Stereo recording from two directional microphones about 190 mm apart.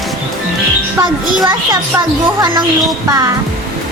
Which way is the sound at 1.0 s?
20° right (ahead or behind).